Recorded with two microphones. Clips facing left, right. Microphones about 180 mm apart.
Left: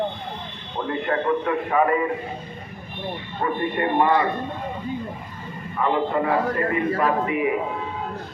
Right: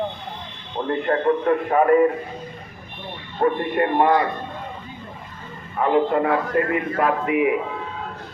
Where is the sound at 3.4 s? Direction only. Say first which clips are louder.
Right 4 dB; 55° right (ahead or behind).